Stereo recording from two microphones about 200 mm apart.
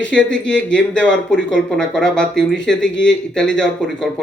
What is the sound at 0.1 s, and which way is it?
Speech, 5° left (ahead or behind).